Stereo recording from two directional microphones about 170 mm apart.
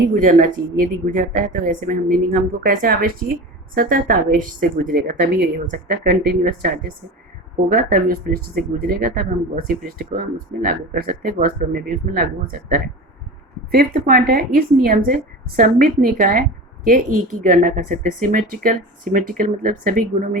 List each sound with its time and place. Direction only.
0.1 s a woman's voice: 50° right (ahead or behind)
4.9 s a woman's voice: 80° right; by 20.4 s 50° right (ahead or behind)